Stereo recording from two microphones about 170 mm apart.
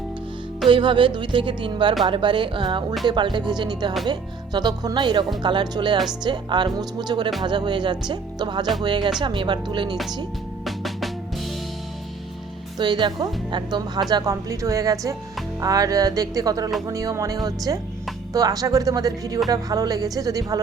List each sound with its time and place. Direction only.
0.7 s speech: 30° right (ahead or behind)
10.7 s music: centre (ahead or behind)
12.8 s speech: 25° right (ahead or behind)